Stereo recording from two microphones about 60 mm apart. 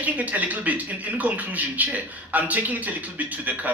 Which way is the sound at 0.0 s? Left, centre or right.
Right.